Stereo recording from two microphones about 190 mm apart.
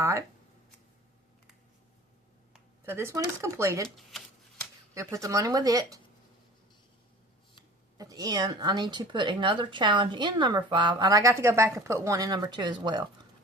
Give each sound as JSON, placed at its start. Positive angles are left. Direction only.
{"t": 0.0, "sound": "speech", "side_deg": -15}
{"t": 2.8, "sound": "speech", "side_deg": -10}
{"t": 3.8, "sound": "shuffling cards", "side_deg": 0}
{"t": 4.9, "sound": "speech", "side_deg": -15}
{"t": 7.9, "sound": "speech", "side_deg": -20}